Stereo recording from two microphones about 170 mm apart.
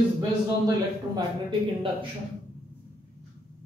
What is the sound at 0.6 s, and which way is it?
Speech, 25° right (ahead or behind).